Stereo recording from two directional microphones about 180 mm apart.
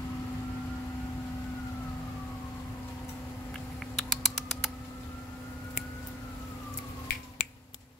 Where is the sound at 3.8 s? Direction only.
Centre (ahead or behind).